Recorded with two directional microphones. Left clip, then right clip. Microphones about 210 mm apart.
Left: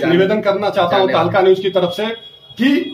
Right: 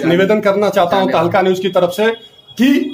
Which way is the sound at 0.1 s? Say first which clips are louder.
Right 4 dB; 50° right (ahead or behind).